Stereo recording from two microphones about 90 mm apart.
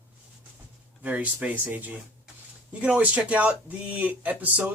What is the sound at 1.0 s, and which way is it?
Speech, 15° right (ahead or behind).